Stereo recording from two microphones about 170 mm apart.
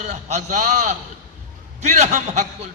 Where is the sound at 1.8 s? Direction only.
40° right (ahead or behind).